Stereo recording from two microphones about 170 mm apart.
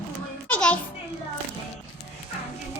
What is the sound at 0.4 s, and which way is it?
Music, 5° left (ahead or behind).